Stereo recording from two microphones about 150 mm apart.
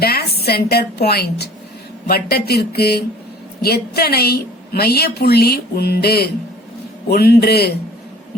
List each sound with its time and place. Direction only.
0.0 s a woman's voice: 90° left